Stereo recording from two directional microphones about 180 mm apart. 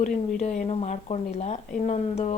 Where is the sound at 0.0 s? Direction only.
40° left (ahead or behind).